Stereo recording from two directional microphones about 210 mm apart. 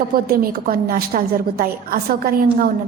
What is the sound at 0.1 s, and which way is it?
A woman's voice, 45° right (ahead or behind).